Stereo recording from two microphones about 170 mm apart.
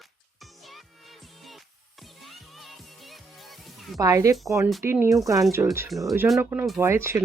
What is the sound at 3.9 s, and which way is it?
Speech, 20° right (ahead or behind).